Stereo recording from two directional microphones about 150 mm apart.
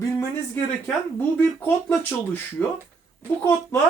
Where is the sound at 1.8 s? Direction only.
10° left (ahead or behind).